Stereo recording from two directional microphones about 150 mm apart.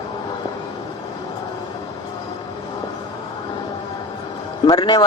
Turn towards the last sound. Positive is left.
turn(degrees=30)  # may be behind; listen again after turning